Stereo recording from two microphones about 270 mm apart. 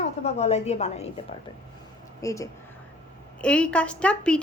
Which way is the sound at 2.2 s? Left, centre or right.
Centre.